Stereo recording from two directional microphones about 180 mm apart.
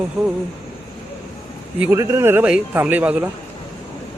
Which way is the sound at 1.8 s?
15° right (ahead or behind).